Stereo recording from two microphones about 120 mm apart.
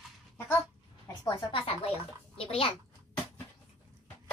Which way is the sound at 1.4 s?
45° left (ahead or behind).